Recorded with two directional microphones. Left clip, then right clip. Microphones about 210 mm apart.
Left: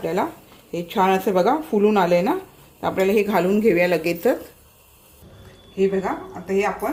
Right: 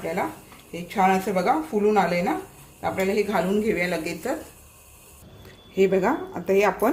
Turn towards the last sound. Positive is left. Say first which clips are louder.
# right 2 dB
turn(degrees=-50)  # may be behind; listen again after turning